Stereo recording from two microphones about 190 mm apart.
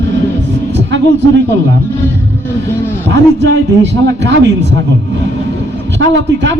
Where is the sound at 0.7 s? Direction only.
70° right (ahead or behind).